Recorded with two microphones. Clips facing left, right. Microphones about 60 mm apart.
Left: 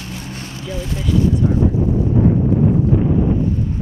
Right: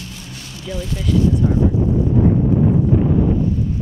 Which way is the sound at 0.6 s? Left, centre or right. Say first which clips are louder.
Even; left.